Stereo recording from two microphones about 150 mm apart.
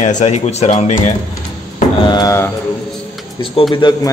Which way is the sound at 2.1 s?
25° left (ahead or behind).